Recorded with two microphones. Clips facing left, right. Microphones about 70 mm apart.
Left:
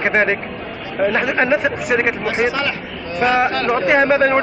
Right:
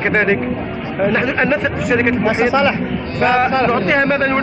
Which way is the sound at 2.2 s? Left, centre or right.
Centre.